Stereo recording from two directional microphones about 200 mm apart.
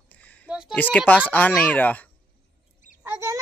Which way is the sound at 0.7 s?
10° left (ahead or behind).